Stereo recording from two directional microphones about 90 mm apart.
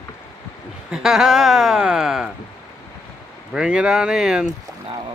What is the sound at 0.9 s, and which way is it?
Speech, 5° right (ahead or behind).